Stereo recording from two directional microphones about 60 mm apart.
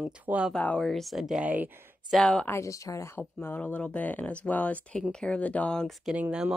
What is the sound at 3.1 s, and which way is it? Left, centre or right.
Speech, left.